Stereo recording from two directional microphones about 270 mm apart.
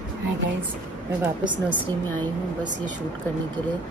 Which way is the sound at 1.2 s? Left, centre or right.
Centre.